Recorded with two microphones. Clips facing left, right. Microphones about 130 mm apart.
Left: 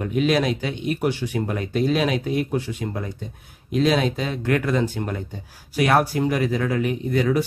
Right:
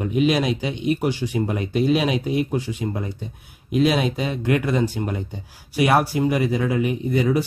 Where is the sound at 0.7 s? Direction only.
50° left (ahead or behind).